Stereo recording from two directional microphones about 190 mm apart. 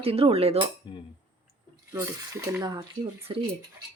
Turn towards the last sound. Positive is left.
turn(degrees=-25)  # may be behind; listen again after turning